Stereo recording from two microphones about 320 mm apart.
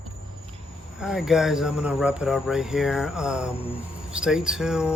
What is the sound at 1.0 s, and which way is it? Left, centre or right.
Speech, centre.